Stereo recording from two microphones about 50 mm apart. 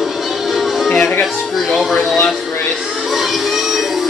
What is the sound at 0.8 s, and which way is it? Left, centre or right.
Music, left.